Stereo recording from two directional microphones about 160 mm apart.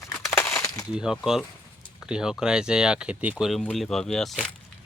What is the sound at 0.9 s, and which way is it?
Speech, 5° right (ahead or behind).